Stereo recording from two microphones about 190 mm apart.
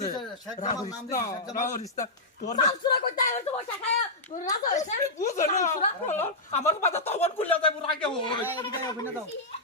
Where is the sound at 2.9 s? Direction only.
55° left (ahead or behind); by 8.9 s 25° left (ahead or behind).